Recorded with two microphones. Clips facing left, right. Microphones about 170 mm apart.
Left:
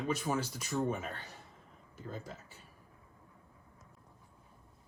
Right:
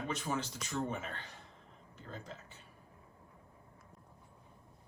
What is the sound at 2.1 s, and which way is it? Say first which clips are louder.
Speech: left 3 dB; 10° left (ahead or behind).